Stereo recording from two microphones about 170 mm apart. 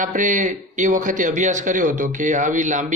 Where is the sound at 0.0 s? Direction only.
50° right (ahead or behind).